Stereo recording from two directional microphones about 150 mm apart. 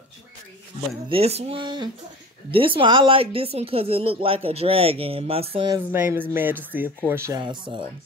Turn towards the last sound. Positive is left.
turn(degrees=-30)  # may be behind; listen again after turning